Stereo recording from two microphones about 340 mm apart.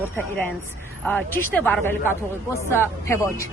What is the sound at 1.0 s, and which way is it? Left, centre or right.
Speech, centre.